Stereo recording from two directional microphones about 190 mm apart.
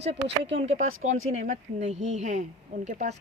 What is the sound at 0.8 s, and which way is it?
Speech, 90° right.